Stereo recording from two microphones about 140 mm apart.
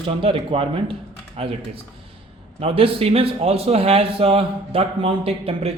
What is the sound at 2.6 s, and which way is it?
A man's voice, 40° right (ahead or behind).